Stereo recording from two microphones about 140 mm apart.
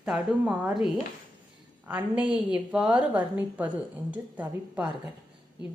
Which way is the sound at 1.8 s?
10° right (ahead or behind).